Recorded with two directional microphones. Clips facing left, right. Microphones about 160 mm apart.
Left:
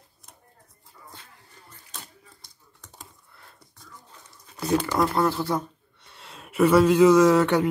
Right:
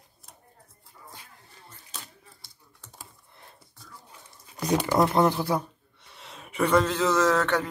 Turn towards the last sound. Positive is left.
turn(degrees=10)  # may be behind; listen again after turning